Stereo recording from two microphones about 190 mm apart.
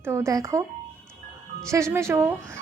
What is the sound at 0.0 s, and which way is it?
Speech, 15° right (ahead or behind).